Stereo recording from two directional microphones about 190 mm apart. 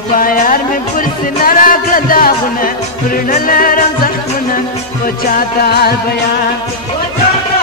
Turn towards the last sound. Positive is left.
turn(degrees=55)  # may be behind; listen again after turning